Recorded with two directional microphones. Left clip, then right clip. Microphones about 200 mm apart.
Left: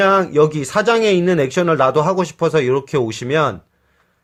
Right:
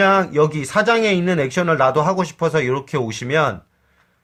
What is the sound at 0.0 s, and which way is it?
Speech, 25° left (ahead or behind).